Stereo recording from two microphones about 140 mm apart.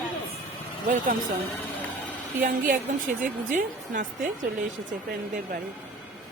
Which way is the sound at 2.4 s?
80° right.